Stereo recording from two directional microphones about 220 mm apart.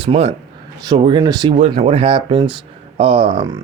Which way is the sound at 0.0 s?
25° right (ahead or behind).